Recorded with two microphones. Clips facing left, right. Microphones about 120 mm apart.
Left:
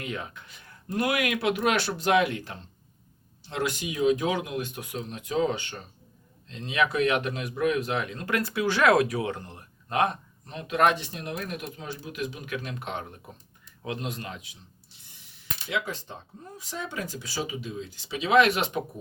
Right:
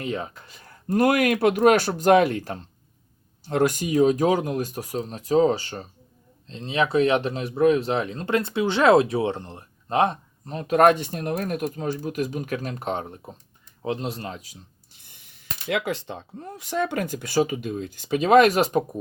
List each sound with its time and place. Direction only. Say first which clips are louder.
0.0 s speech: right 6 dB; 35° right (ahead or behind)